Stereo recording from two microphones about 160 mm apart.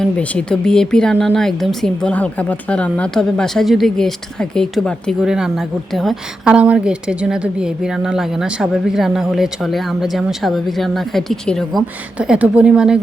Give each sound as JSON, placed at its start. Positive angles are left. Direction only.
{"t": 0.0, "sound": "speech", "side_deg": 5}